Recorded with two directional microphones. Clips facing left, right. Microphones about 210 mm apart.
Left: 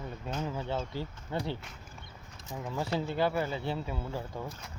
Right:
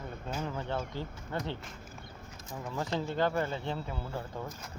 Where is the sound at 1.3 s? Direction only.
15° left (ahead or behind).